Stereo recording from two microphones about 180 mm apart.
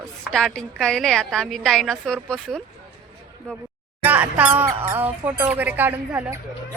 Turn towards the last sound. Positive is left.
turn(degrees=-10)  # may be behind; listen again after turning